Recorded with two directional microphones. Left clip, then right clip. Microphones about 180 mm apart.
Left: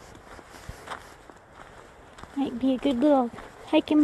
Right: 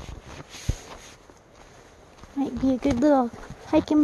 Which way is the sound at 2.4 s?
15° right (ahead or behind).